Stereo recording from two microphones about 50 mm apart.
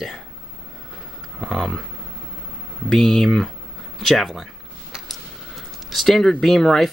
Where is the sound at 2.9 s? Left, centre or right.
Centre.